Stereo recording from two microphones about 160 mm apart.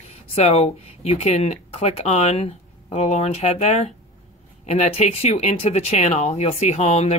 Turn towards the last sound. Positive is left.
turn(degrees=45)  # may be behind; listen again after turning